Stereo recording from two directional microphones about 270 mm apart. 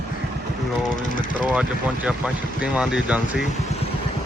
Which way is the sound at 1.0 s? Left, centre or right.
Left.